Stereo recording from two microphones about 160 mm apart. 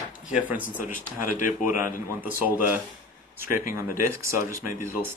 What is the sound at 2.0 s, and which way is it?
Speech, 10° right (ahead or behind).